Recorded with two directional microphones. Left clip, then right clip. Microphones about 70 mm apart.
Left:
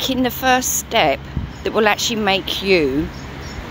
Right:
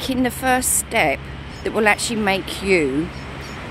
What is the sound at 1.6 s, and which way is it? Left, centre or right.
Speech, right.